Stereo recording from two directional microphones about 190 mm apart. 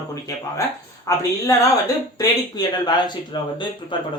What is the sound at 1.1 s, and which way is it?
A woman's voice, 15° left (ahead or behind).